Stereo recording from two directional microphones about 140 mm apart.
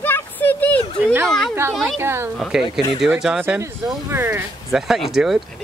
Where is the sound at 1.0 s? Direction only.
15° right (ahead or behind).